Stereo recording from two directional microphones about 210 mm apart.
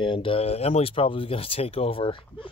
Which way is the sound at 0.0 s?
25° left (ahead or behind).